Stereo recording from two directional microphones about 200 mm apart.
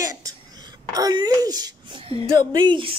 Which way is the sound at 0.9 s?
20° right (ahead or behind).